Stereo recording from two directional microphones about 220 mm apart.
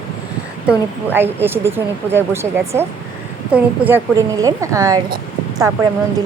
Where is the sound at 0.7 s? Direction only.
10° right (ahead or behind).